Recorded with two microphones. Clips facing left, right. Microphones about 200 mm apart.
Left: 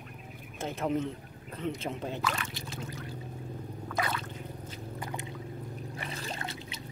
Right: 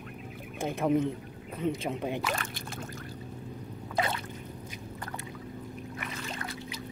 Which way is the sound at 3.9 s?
25° right (ahead or behind).